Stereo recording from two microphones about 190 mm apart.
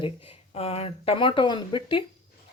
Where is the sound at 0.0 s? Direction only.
30° left (ahead or behind).